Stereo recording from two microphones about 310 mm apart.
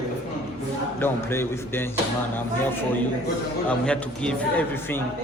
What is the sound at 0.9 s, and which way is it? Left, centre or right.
A man's voice, centre.